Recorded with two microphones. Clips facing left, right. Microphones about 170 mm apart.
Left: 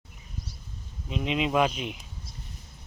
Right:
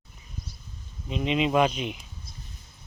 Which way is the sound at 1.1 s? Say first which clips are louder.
Right 2 dB; centre (ahead or behind).